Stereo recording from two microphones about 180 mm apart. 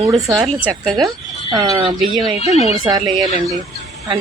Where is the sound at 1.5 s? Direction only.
25° right (ahead or behind).